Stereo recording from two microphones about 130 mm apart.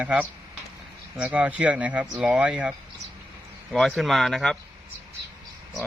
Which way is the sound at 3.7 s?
Centre (ahead or behind).